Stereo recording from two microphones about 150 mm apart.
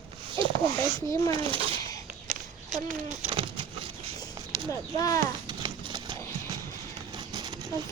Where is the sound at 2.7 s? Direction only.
Centre (ahead or behind).